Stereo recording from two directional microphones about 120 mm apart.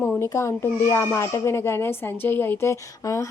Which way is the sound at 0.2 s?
25° left (ahead or behind).